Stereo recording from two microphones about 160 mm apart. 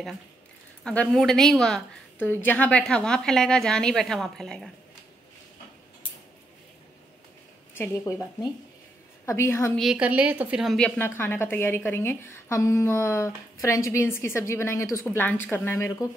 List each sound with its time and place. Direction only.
0.8 s a woman's voice: 5° left (ahead or behind)
7.7 s a woman's voice: 15° left (ahead or behind)
9.8 s a woman's voice: 5° right (ahead or behind)
11.0 s a woman's voice: 15° left (ahead or behind)